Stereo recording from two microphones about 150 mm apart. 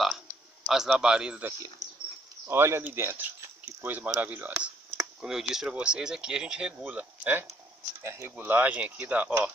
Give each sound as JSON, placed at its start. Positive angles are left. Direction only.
{"t": 0.7, "sound": "a man's voice", "side_deg": -5}
{"t": 2.4, "sound": "speech", "side_deg": -15}